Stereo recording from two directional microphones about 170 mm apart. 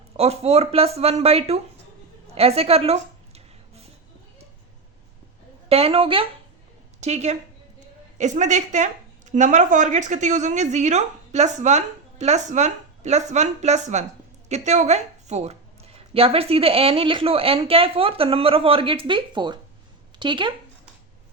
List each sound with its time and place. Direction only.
0.2 s a woman's voice: 40° right (ahead or behind)
2.3 s a sound: 35° right (ahead or behind)
5.6 s a woman's voice: 35° right (ahead or behind)